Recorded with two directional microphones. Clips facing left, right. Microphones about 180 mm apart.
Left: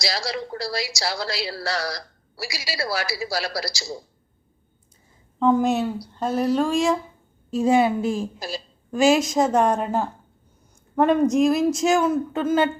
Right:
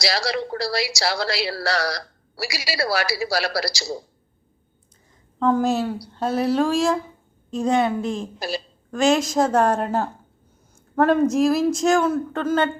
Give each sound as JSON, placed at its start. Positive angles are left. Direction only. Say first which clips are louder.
{"t": 0.0, "sound": "a woman's voice", "louder": "right 4 dB", "side_deg": -70}
{"t": 5.4, "sound": "a woman's voice", "louder": "left 1 dB", "side_deg": 0}
{"t": 8.4, "sound": "a woman's voice", "louder": "right 4 dB", "side_deg": -70}
{"t": 8.9, "sound": "a woman's voice", "louder": "left 1 dB", "side_deg": 5}